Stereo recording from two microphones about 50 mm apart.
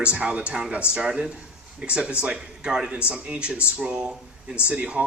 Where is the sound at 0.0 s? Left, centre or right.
Right.